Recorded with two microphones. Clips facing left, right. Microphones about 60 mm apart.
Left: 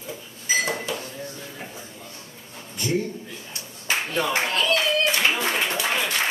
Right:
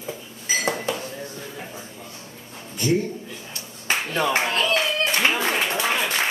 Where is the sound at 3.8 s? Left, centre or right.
Right.